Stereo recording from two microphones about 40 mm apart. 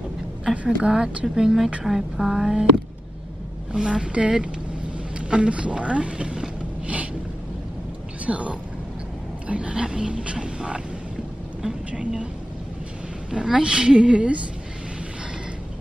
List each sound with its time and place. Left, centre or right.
0.7 s speech: centre
3.7 s speech: centre
8.3 s speech: right
13.3 s speech: centre